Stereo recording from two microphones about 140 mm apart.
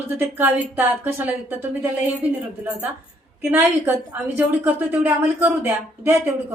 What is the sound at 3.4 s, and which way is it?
A woman's voice, 15° right (ahead or behind).